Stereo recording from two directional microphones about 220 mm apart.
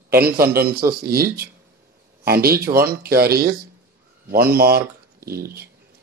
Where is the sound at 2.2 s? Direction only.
45° right (ahead or behind).